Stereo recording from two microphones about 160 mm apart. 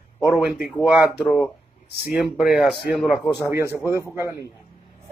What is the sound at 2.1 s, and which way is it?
Speech, 5° right (ahead or behind).